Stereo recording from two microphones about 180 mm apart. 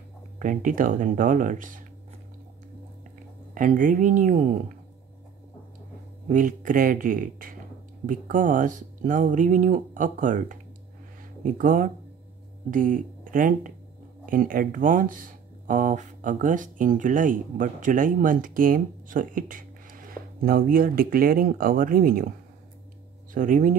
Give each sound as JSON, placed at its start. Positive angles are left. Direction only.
{"t": 0.4, "sound": "speech", "side_deg": -45}
{"t": 3.5, "sound": "speech", "side_deg": -45}
{"t": 6.2, "sound": "speech", "side_deg": -45}
{"t": 23.3, "sound": "speech", "side_deg": -50}